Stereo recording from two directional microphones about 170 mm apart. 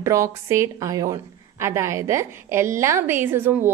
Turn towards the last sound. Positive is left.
turn(degrees=-15)  # may be behind; listen again after turning